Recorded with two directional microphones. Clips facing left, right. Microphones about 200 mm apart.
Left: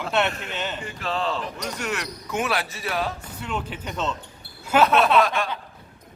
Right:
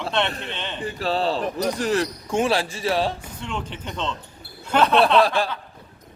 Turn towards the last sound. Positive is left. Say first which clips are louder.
# right 2 dB
turn(degrees=-30)  # may be behind; listen again after turning